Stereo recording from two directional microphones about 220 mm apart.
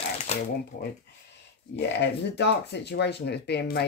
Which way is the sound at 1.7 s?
50° left (ahead or behind).